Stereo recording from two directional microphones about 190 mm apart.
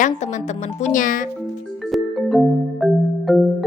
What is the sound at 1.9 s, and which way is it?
Music, centre (ahead or behind).